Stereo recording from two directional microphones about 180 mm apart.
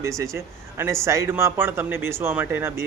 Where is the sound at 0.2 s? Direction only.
15° right (ahead or behind).